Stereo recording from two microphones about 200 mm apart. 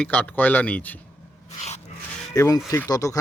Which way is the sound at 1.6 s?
35° left (ahead or behind).